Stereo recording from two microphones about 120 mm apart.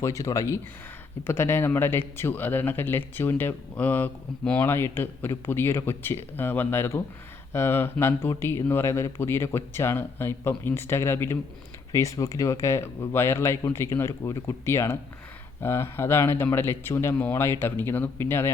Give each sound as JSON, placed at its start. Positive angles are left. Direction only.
{"t": 0.0, "sound": "speech", "side_deg": 25}